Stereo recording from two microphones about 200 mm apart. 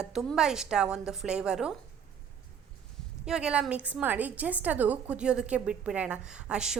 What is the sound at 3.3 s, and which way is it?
A woman's voice, 5° right (ahead or behind).